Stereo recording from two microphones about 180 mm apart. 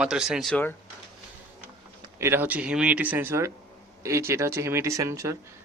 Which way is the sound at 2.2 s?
10° right (ahead or behind).